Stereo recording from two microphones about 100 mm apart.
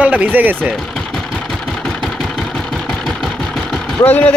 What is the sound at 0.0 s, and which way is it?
Speech, 15° right (ahead or behind).